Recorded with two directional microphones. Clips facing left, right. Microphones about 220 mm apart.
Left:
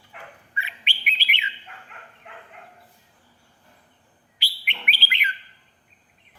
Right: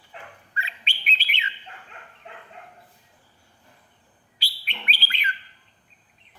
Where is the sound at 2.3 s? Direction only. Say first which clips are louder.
Right 1 dB; 30° right (ahead or behind).